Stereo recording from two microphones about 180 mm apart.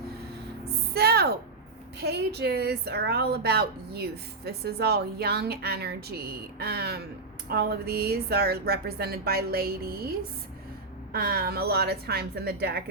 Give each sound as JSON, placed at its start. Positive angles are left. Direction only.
{"t": 0.9, "sound": "a sound", "side_deg": -60}
{"t": 2.0, "sound": "a woman's voice", "side_deg": -65}
{"t": 11.1, "sound": "a woman's voice", "side_deg": -60}